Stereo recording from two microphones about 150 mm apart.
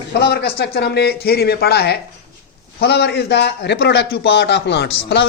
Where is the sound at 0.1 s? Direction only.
85° left.